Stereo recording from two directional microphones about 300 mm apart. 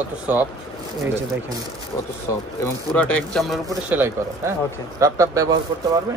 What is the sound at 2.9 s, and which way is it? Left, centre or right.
Speech, centre.